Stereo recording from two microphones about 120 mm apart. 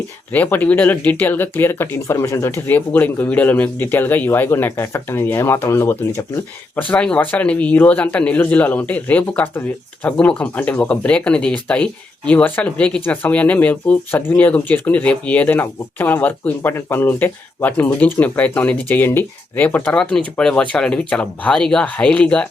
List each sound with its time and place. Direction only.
0.3 s speech: 15° left (ahead or behind)